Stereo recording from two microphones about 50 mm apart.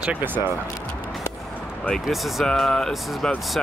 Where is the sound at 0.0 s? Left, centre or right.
Right.